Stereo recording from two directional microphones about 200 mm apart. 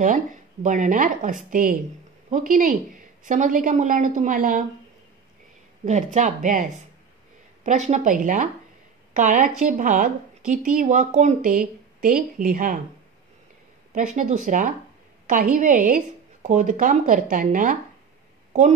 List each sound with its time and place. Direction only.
0.0 s speech: 40° right (ahead or behind)
5.8 s speech: 35° right (ahead or behind)
13.9 s a woman's voice: 40° right (ahead or behind)